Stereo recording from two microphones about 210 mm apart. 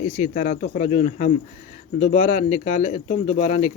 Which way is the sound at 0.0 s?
35° left (ahead or behind).